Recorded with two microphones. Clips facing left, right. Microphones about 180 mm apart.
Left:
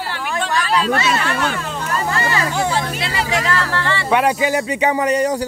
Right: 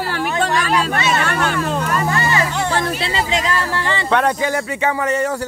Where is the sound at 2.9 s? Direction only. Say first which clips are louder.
Right 1 dB; 25° right (ahead or behind).